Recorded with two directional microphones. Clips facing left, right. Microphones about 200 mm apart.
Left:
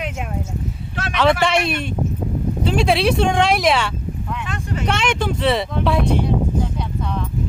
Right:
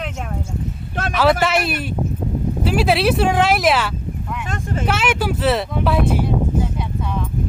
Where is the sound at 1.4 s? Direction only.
5° right (ahead or behind).